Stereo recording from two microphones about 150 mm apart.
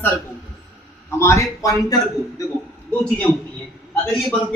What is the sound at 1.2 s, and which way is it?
Speech, 20° left (ahead or behind).